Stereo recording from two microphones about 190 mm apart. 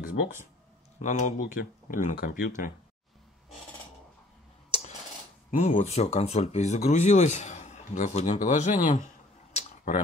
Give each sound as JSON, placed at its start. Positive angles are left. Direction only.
{"t": 0.0, "sound": "speech", "side_deg": 45}
{"t": 4.6, "sound": "a sound", "side_deg": 30}
{"t": 5.6, "sound": "speech", "side_deg": 40}